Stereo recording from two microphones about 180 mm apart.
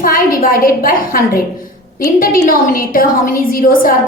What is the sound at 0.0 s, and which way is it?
A woman's voice, 50° left (ahead or behind).